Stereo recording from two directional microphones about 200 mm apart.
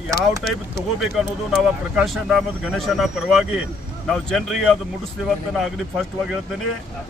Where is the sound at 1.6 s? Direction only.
Centre (ahead or behind).